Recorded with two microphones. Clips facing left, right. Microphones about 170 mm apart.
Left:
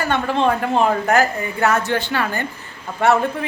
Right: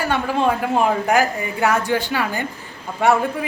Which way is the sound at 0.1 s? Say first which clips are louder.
Left 2 dB; 10° right (ahead or behind).